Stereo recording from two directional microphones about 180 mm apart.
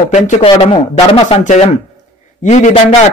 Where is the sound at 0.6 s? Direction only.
30° left (ahead or behind).